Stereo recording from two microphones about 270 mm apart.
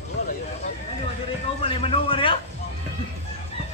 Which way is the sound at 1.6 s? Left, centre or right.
Left.